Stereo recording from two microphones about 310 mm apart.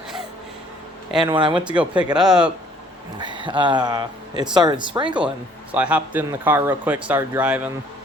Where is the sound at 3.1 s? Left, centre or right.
Centre.